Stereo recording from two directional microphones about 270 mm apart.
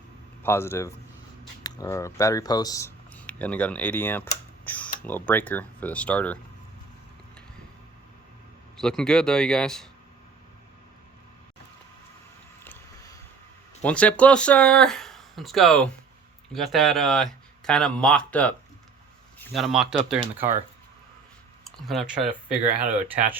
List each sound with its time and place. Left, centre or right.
0.4 s a man's voice: centre
8.8 s speech: centre
12.6 s vehicle: centre
13.8 s speech: centre
21.8 s speech: centre